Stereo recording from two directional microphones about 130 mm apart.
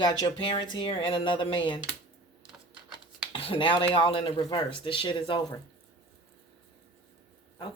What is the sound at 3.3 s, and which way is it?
Speech, 45° left (ahead or behind).